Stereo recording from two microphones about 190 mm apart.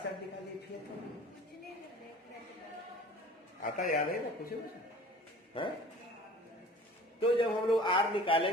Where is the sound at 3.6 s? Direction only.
45° left (ahead or behind).